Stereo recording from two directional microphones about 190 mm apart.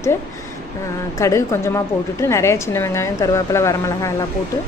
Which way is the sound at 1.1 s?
15° left (ahead or behind).